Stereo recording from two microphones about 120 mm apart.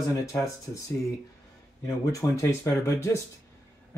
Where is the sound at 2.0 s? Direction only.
25° left (ahead or behind).